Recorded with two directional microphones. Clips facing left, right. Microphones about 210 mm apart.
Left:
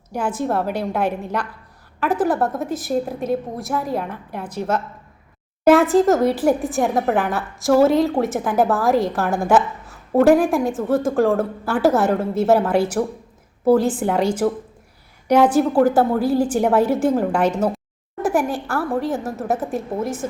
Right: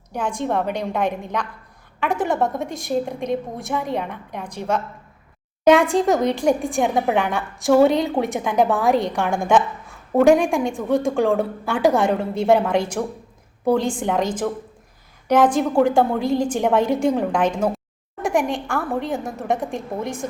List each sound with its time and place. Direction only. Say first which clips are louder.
0.1 s a woman's voice: left 1 dB; 5° left (ahead or behind)